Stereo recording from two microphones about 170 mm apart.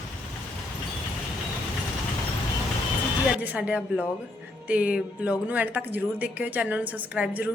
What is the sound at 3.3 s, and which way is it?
Speech, 10° right (ahead or behind).